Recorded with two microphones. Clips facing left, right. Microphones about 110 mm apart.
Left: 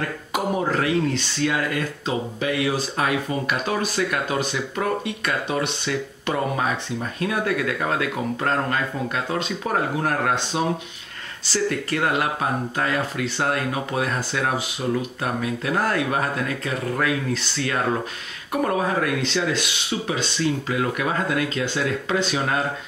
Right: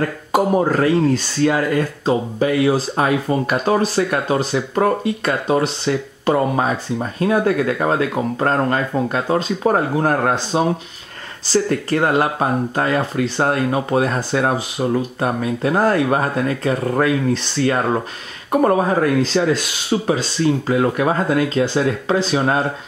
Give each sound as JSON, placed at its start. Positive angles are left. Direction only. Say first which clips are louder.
{"t": 0.3, "sound": "speech", "louder": "right 7 dB", "side_deg": -40}